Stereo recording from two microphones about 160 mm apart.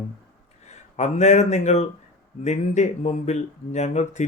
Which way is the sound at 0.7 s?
45° left (ahead or behind).